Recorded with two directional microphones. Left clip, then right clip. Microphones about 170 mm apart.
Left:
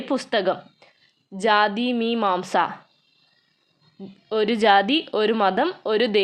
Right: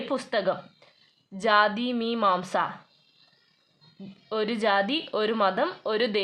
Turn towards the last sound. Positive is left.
turn(degrees=25)  # may be behind; listen again after turning